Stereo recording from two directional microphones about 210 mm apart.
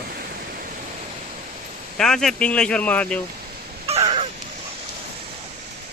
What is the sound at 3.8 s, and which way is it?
Crow, 30° right (ahead or behind).